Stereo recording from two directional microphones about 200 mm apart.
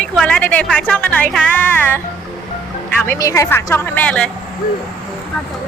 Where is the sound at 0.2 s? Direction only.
5° left (ahead or behind).